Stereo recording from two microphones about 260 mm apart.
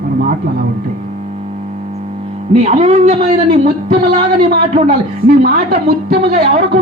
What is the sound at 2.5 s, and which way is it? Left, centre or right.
Speech, right.